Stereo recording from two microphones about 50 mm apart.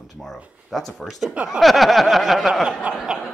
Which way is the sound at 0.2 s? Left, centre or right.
Centre.